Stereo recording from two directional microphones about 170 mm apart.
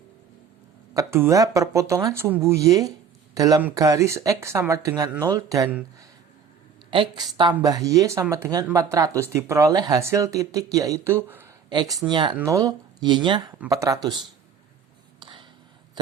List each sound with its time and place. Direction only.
0.9 s speech: 15° right (ahead or behind)
11.7 s speech: 25° right (ahead or behind)
15.2 s a sound: 30° right (ahead or behind)